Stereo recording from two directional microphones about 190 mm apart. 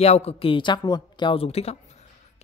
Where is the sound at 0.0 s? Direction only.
35° left (ahead or behind).